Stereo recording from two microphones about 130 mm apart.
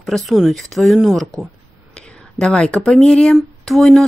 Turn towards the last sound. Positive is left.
turn(degrees=0)  # may be behind; listen again after turning